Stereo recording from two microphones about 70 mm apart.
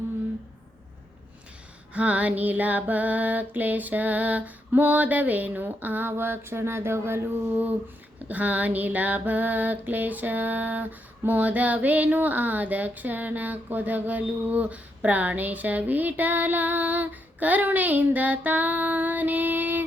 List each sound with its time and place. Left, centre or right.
1.9 s female singing: centre